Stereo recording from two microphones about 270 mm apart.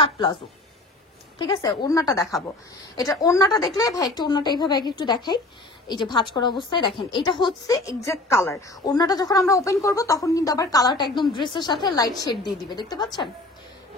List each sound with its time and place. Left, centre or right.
1.4 s a woman's voice: centre